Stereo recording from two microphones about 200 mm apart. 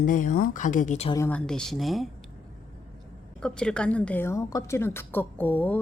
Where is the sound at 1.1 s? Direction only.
10° left (ahead or behind).